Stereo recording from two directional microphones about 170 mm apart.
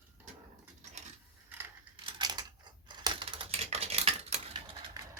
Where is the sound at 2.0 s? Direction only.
25° right (ahead or behind).